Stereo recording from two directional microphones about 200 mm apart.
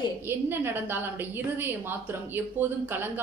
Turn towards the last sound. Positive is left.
turn(degrees=-10)  # may be behind; listen again after turning